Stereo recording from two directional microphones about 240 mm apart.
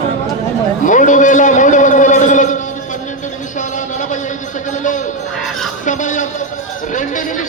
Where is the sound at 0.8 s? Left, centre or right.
Left.